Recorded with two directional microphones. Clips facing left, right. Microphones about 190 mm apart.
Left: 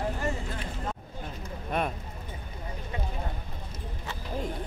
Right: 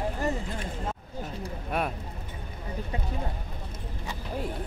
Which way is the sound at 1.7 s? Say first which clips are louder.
Even; 5° right (ahead or behind).